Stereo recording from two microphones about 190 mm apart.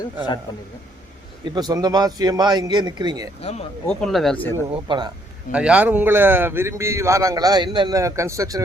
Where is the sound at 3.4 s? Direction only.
35° left (ahead or behind).